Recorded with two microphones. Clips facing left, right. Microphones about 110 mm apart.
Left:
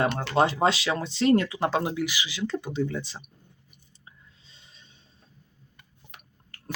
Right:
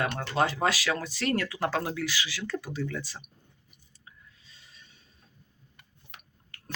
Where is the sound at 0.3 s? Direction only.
25° left (ahead or behind).